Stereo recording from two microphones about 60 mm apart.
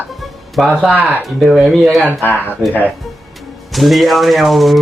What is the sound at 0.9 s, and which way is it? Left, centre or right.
Speech, right.